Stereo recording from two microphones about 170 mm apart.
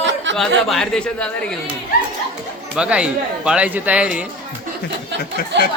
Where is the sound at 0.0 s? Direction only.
90° right.